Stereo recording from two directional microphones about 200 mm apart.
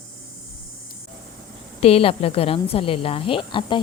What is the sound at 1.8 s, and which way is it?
A woman's voice, 30° left (ahead or behind).